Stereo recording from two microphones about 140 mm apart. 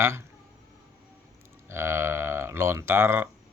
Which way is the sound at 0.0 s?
20° right (ahead or behind).